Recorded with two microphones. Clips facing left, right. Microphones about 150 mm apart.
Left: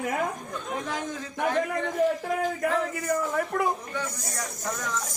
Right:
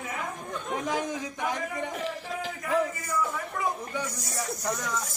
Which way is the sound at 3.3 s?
60° left (ahead or behind).